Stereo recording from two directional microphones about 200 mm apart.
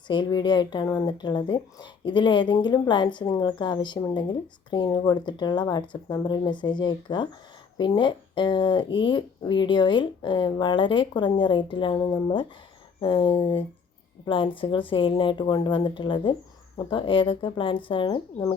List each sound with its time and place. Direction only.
0.1 s speech: 20° left (ahead or behind)